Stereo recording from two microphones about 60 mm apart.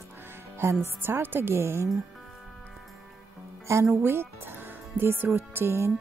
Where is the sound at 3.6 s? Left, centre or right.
Right.